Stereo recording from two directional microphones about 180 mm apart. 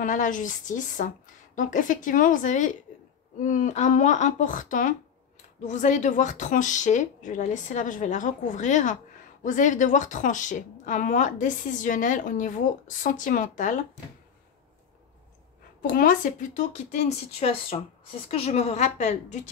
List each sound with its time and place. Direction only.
0.0 s a woman's voice: 45° left (ahead or behind)
15.8 s a woman's voice: 50° left (ahead or behind)